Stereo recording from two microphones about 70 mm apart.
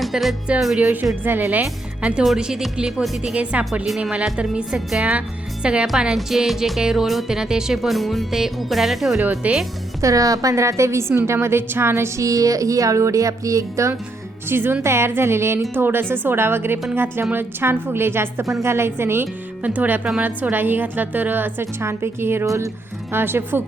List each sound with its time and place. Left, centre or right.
0.0 s speech: centre
1.2 s a woman's voice: right
2.2 s speech: centre
3.5 s a woman's voice: centre
3.8 s speech: centre
4.1 s a woman's voice: centre
6.1 s speech: centre
9.2 s a woman's voice: centre
10.0 s speech: right
14.5 s speech: right
19.6 s a woman's voice: right
22.4 s speech: right
23.1 s speech: right